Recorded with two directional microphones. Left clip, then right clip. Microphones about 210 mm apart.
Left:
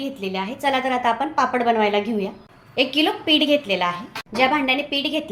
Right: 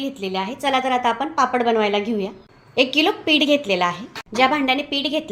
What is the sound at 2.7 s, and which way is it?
A woman's voice, 25° right (ahead or behind).